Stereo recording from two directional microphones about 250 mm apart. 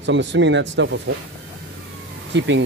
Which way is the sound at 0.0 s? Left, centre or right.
Right.